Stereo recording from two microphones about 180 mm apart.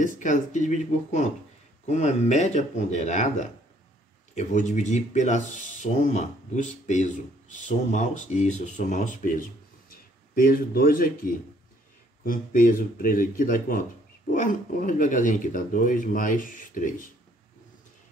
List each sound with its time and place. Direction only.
0.0 s speech: 45° left (ahead or behind)